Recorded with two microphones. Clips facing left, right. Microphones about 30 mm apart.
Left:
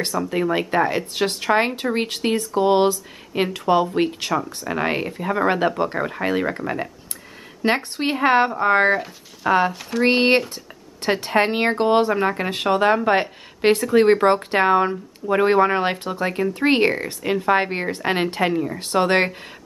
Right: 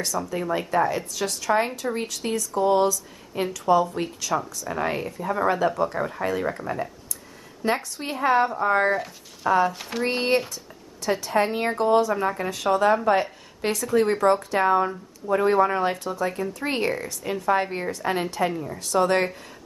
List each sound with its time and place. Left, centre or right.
0.3 s speech: left
9.5 s speech: left
9.8 s speech: centre
10.0 s speech: left